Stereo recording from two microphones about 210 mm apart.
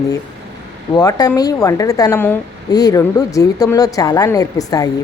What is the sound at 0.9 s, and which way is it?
A woman's voice, 20° left (ahead or behind).